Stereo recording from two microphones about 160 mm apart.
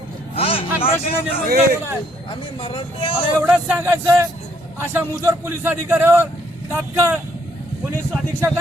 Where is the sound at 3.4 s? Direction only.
10° right (ahead or behind).